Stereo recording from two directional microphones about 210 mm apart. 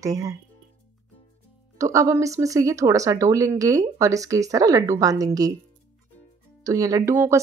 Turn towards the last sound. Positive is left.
turn(degrees=-10)  # may be behind; listen again after turning